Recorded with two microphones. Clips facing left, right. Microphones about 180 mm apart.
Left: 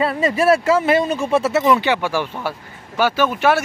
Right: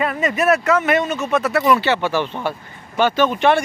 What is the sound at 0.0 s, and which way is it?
Speech, 30° left (ahead or behind).